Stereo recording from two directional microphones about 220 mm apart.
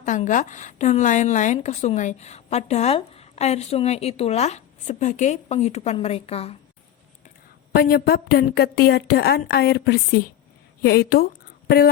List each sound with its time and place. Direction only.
0.0 s a woman's voice: 35° left (ahead or behind)
7.7 s a woman's voice: 45° left (ahead or behind)